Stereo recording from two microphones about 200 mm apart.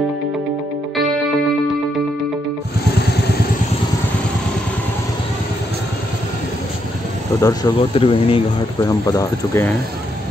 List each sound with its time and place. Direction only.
0.9 s music: centre (ahead or behind)
7.3 s speech: 15° left (ahead or behind)
7.9 s speech: 25° left (ahead or behind)
8.8 s speech: 15° left (ahead or behind)